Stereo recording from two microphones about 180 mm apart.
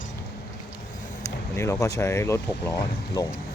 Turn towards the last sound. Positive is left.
turn(degrees=20)  # may be behind; listen again after turning